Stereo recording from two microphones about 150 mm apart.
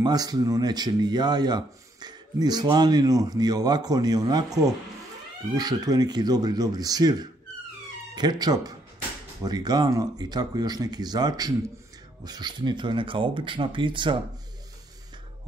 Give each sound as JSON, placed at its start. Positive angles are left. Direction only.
{"t": 0.0, "sound": "speech", "side_deg": -25}
{"t": 5.5, "sound": "speech", "side_deg": -25}